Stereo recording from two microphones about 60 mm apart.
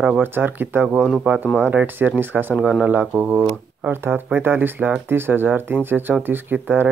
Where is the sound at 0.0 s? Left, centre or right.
Right.